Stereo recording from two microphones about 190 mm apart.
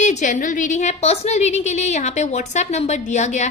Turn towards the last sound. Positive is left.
turn(degrees=35)  # may be behind; listen again after turning